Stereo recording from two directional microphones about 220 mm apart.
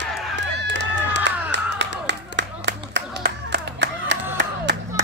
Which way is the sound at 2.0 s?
55° right (ahead or behind).